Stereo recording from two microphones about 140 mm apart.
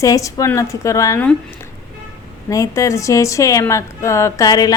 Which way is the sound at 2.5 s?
25° left (ahead or behind).